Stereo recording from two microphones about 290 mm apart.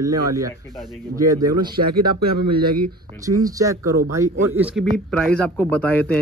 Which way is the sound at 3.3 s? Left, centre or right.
Centre.